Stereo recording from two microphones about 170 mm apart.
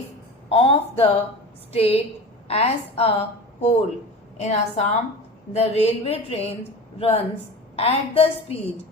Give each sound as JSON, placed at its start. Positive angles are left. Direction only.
{"t": 0.5, "sound": "a woman's voice", "side_deg": 35}